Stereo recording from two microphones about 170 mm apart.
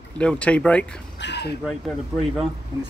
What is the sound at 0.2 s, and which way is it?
Speech, 5° left (ahead or behind).